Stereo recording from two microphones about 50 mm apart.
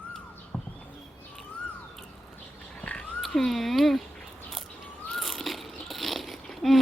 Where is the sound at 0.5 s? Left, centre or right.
Centre.